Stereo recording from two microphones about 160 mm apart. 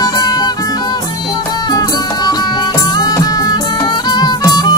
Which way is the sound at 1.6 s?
25° left (ahead or behind).